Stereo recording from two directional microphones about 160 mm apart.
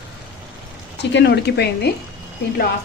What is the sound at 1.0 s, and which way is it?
Speech, 90° left.